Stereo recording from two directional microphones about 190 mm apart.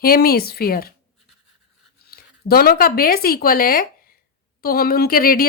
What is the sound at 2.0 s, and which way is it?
A woman's voice, 50° left (ahead or behind).